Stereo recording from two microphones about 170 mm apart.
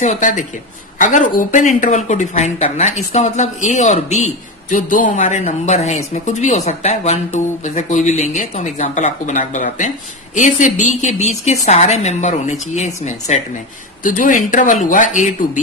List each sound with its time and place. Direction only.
0.0 s speech: 45° left (ahead or behind)